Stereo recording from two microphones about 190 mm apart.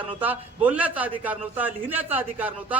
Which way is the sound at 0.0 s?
10° right (ahead or behind).